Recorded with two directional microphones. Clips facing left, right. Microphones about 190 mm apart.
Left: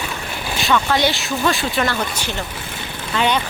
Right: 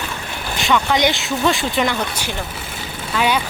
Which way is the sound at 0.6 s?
15° right (ahead or behind).